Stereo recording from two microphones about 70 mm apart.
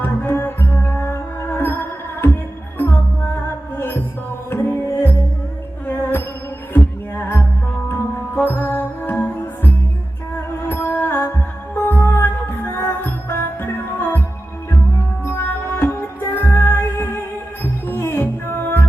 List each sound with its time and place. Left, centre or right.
0.0 s music: left
10.7 s music: left
14.7 s music: left